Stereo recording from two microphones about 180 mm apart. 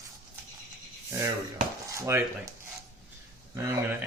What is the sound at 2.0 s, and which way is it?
Speech, 15° right (ahead or behind).